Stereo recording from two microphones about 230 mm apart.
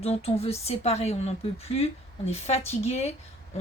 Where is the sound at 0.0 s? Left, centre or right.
Left.